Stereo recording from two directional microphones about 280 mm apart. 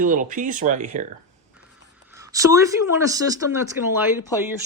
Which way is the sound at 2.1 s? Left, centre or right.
Centre.